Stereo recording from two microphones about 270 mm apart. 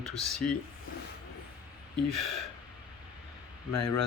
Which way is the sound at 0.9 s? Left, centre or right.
Left.